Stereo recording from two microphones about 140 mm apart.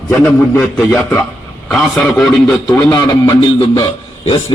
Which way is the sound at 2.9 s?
30° left (ahead or behind).